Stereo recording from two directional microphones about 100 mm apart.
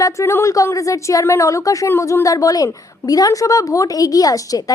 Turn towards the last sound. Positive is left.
turn(degrees=35)  # may be behind; listen again after turning